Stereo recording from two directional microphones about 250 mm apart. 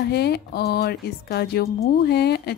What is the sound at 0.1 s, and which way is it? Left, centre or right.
A woman's voice, left.